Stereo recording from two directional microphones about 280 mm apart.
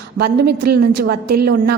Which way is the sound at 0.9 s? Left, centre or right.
Right.